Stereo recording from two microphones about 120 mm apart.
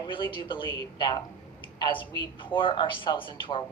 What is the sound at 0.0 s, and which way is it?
A woman's voice, 40° left (ahead or behind).